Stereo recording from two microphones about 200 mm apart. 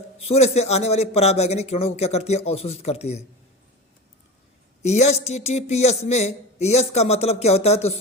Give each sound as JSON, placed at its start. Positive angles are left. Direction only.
{"t": 0.3, "sound": "a woman's voice", "side_deg": 35}
{"t": 4.8, "sound": "a woman's voice", "side_deg": 35}